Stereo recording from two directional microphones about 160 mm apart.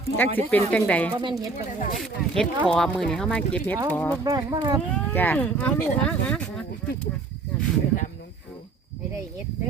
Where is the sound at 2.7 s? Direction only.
5° left (ahead or behind).